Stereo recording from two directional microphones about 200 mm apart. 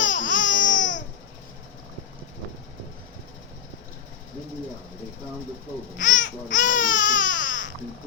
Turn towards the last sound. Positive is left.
turn(degrees=40)  # may be behind; listen again after turning